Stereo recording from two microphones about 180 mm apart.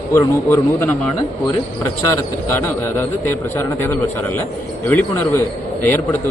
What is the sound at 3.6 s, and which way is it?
Speech, 15° left (ahead or behind).